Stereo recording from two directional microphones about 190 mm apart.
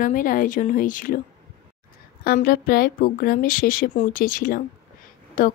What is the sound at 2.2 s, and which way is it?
A woman's voice, 50° left (ahead or behind).